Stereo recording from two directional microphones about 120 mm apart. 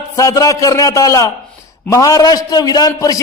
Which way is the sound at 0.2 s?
25° left (ahead or behind).